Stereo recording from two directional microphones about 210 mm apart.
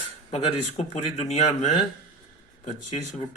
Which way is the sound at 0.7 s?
35° left (ahead or behind).